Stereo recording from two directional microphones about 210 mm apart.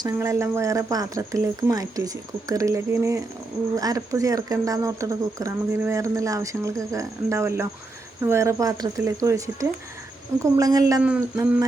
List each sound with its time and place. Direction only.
0.0 s speech: 15° right (ahead or behind)